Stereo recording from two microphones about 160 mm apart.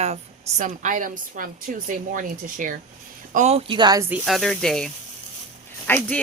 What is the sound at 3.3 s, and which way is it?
Speech, 45° right (ahead or behind).